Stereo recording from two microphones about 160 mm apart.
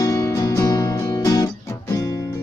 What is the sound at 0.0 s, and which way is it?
Guitar, 20° left (ahead or behind).